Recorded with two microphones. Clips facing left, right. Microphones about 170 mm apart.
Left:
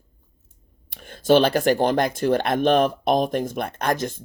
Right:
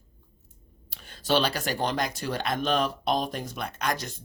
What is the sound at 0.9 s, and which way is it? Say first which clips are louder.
Speech: left 9 dB; 50° left (ahead or behind).